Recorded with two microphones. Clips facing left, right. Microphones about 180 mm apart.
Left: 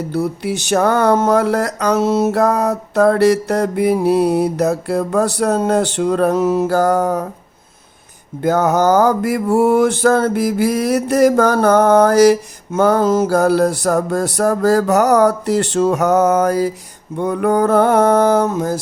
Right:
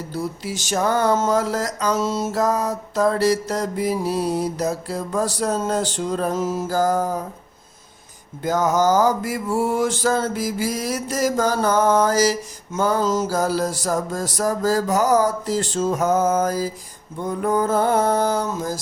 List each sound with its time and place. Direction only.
0.1 s mantra: 65° left (ahead or behind)
8.4 s mantra: 60° left (ahead or behind)
17.2 s a sound: 70° left (ahead or behind)